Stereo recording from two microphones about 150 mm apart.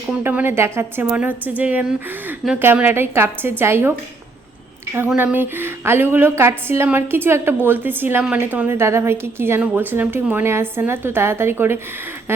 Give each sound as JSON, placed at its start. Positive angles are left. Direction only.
{"t": 0.1, "sound": "a woman's voice", "side_deg": -10}
{"t": 5.0, "sound": "a woman's voice", "side_deg": -10}